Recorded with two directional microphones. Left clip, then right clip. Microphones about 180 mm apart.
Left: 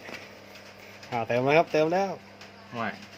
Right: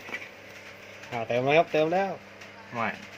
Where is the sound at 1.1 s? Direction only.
10° left (ahead or behind).